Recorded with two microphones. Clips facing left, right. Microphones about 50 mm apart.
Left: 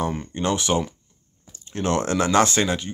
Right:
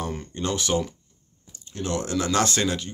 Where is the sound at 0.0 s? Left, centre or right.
Left.